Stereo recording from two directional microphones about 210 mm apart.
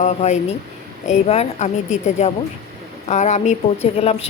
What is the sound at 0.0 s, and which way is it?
A woman's voice, 30° left (ahead or behind).